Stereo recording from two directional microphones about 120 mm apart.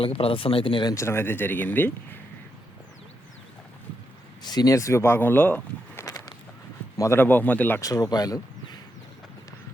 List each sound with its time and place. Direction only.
0.0 s speech: 50° left (ahead or behind)
0.9 s speech: 20° left (ahead or behind)
4.4 s speech: 35° left (ahead or behind); by 6.1 s 15° left (ahead or behind)
6.9 s speech: 30° left (ahead or behind)
7.2 s speech: 15° left (ahead or behind)
7.8 s speech: 30° left (ahead or behind)